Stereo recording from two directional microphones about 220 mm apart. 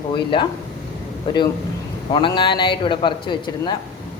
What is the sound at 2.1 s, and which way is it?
Speech, 20° left (ahead or behind).